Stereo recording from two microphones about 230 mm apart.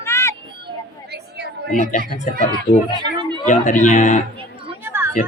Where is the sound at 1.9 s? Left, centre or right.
Left.